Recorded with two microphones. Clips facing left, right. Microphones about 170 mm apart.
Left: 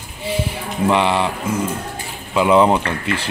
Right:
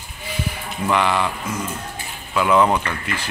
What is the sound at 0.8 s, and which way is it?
Speech, 30° left (ahead or behind).